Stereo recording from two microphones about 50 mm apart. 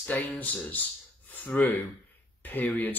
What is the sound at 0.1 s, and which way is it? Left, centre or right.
Speech, left.